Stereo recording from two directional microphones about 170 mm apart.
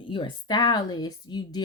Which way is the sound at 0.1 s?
30° left (ahead or behind).